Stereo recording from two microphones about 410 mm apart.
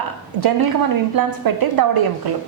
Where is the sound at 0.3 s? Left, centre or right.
Right.